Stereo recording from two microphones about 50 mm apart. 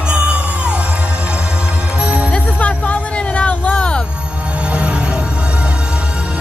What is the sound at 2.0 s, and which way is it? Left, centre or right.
Music, right.